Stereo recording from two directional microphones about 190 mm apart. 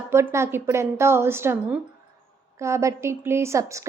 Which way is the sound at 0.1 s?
15° right (ahead or behind).